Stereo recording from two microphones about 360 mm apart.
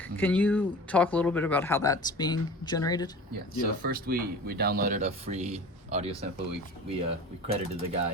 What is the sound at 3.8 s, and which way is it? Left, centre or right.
Speech, right.